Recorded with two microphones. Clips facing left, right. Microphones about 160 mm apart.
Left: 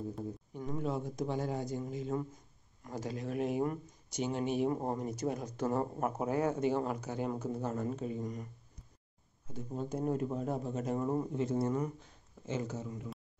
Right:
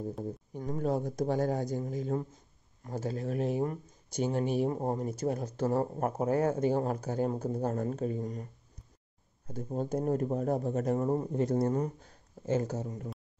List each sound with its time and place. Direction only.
0.2 s speech: 40° right (ahead or behind)
2.8 s speech: 30° right (ahead or behind)
4.2 s speech: 45° right (ahead or behind)
9.5 s speech: 40° right (ahead or behind)